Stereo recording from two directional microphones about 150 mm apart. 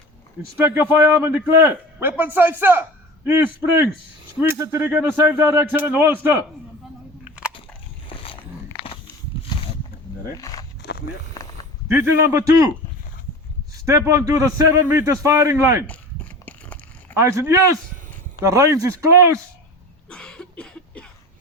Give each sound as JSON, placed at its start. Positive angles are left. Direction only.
{"t": 0.6, "sound": "a man's voice", "side_deg": -15}
{"t": 8.1, "sound": "a sound", "side_deg": 40}
{"t": 10.3, "sound": "speech", "side_deg": 25}
{"t": 11.9, "sound": "a man's voice", "side_deg": -15}
{"t": 13.8, "sound": "a man's voice", "side_deg": -20}
{"t": 17.2, "sound": "a man's voice", "side_deg": -20}
{"t": 20.1, "sound": "a sound", "side_deg": 5}